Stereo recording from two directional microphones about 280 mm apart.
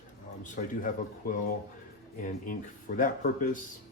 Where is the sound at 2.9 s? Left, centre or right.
Left.